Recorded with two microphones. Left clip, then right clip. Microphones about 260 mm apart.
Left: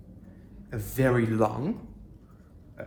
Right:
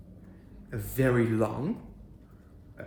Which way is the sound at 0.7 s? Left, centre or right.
Centre.